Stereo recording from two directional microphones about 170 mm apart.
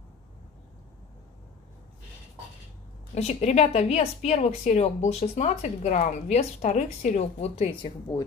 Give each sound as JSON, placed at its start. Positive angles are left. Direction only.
{"t": 3.2, "sound": "speech", "side_deg": 40}